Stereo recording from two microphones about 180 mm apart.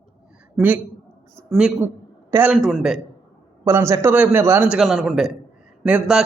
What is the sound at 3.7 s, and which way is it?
A man's voice, 15° right (ahead or behind).